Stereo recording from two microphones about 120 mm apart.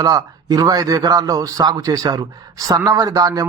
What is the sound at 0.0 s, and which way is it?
Speech, 30° right (ahead or behind).